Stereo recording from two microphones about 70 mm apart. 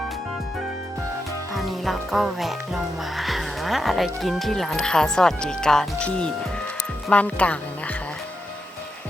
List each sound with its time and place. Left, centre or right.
1.5 s speech: centre